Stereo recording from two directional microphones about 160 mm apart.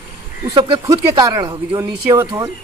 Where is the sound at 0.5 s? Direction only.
25° right (ahead or behind).